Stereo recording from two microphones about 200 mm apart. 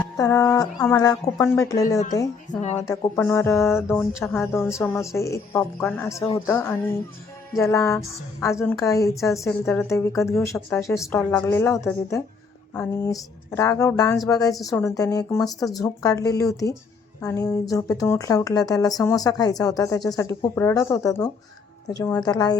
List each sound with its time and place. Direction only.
0.2 s speech: 15° left (ahead or behind)
2.5 s a woman's voice: 35° left (ahead or behind)
2.8 s a woman's voice: 20° left (ahead or behind)